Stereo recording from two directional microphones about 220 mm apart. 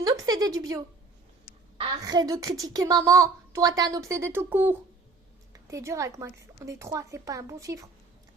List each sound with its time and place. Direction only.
0.0 s a woman's voice: 15° right (ahead or behind)
1.8 s a woman's voice: 20° right (ahead or behind)